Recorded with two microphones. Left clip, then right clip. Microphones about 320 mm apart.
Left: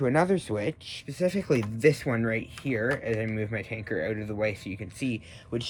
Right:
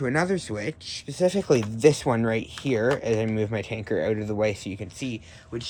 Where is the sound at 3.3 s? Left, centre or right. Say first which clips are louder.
Right 5 dB; right.